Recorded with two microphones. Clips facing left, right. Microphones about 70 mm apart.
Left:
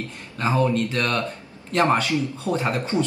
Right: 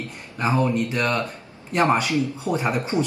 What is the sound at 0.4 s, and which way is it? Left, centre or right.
Speech, centre.